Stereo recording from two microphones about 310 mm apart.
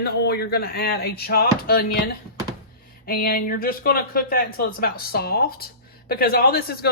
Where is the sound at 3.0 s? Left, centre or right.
Left.